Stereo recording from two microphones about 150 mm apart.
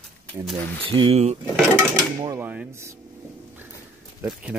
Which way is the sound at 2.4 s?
10° right (ahead or behind).